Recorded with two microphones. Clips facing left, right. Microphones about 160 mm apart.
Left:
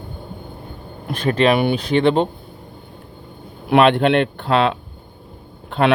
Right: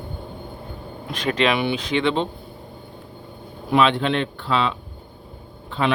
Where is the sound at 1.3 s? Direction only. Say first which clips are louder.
Left 5 dB; 40° left (ahead or behind).